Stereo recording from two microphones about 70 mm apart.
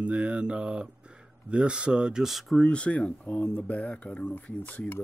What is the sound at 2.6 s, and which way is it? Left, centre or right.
Speech, centre.